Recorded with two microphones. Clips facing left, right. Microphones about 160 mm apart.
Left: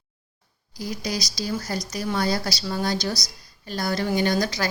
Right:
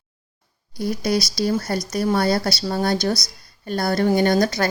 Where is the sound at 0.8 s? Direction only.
60° right (ahead or behind).